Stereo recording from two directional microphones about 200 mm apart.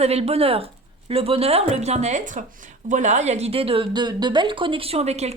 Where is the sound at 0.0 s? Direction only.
30° right (ahead or behind).